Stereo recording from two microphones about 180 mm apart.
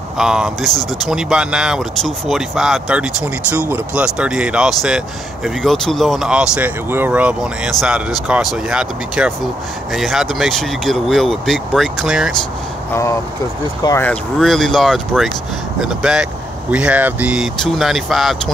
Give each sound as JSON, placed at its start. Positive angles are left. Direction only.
{"t": 0.2, "sound": "speech", "side_deg": -5}
{"t": 12.9, "sound": "speech", "side_deg": 15}
{"t": 14.4, "sound": "speech", "side_deg": 0}